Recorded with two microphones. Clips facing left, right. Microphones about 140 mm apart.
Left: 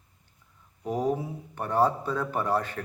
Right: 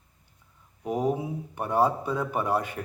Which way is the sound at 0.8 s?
10° right (ahead or behind).